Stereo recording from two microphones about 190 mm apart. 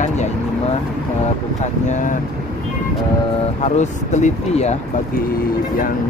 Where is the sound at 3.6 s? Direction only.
40° left (ahead or behind).